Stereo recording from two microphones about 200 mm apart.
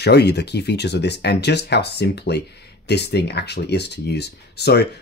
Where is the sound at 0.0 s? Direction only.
55° left (ahead or behind).